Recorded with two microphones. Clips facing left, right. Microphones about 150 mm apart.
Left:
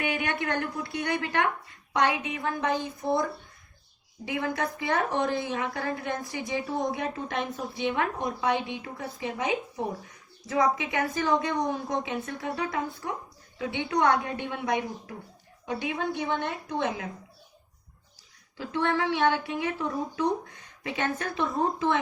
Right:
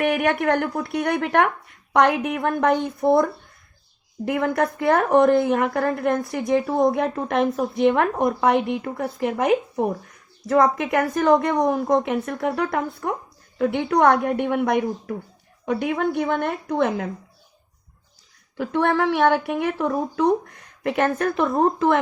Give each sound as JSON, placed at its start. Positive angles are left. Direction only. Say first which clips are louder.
{"t": 0.0, "sound": "a woman's voice", "louder": "right 9 dB", "side_deg": -70}
{"t": 4.3, "sound": "a woman's voice", "louder": "right 8 dB", "side_deg": -65}
{"t": 7.2, "sound": "a woman's voice", "louder": "right 10 dB", "side_deg": -70}
{"t": 18.5, "sound": "a woman's voice", "louder": "right 7 dB", "side_deg": -60}